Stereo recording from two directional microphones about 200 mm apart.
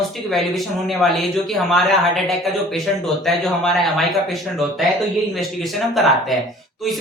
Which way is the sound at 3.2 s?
Centre (ahead or behind).